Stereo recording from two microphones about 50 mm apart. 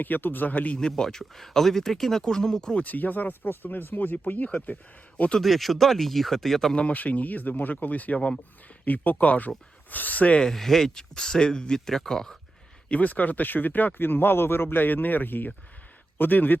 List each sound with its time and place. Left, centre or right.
0.0 s speech: left
0.8 s speech: centre
2.7 s speech: left
5.4 s speech: centre
6.7 s speech: left
10.4 s speech: centre
12.9 s speech: left